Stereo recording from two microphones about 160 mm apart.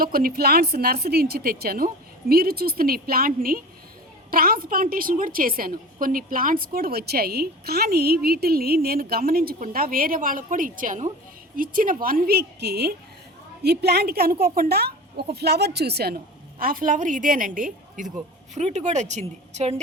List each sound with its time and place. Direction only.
0.0 s a woman's voice: 65° right (ahead or behind); by 19.7 s 45° right (ahead or behind)